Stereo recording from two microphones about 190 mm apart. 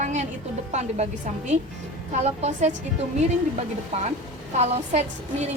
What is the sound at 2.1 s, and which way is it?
Speech, 35° right (ahead or behind).